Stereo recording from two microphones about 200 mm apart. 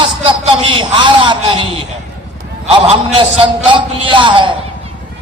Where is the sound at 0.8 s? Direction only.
25° right (ahead or behind).